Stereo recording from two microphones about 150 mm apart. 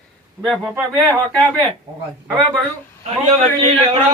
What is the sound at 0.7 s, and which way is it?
Speech, centre (ahead or behind).